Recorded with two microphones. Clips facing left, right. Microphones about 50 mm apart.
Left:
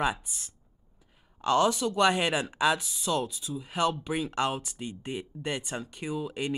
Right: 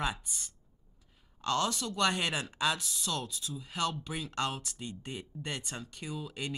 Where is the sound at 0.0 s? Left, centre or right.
Centre.